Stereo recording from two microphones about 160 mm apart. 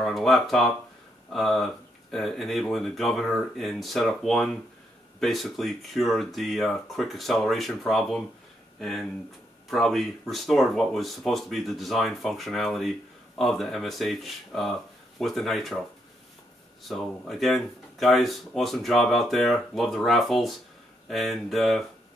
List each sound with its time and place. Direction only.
0.0 s speech: centre (ahead or behind)
16.8 s speech: centre (ahead or behind)